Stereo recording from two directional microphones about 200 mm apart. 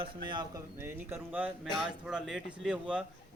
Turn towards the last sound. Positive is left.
turn(degrees=-5)  # may be behind; listen again after turning